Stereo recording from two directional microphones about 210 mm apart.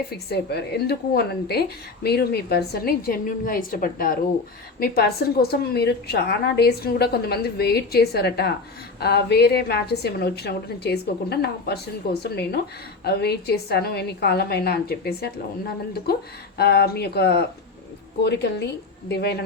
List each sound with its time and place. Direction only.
0.1 s a woman's voice: 50° left (ahead or behind)
16.6 s a woman's voice: 50° left (ahead or behind)